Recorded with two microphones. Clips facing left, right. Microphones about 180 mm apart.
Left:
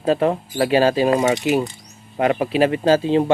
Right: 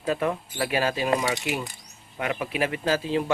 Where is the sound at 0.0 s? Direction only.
30° left (ahead or behind).